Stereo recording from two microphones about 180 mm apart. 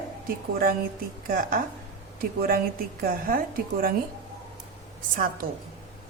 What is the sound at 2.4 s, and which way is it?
A woman's voice, 55° right (ahead or behind).